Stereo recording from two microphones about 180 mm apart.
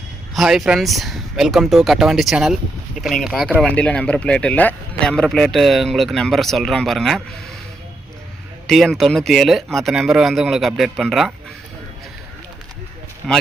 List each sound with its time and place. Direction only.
0.3 s speech: centre (ahead or behind)
8.6 s speech: centre (ahead or behind)
13.2 s speech: centre (ahead or behind)